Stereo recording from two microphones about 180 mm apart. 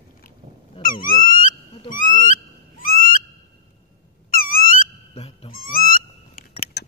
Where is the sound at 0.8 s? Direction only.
50° left (ahead or behind).